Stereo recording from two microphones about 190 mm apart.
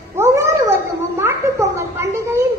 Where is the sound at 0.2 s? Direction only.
15° right (ahead or behind).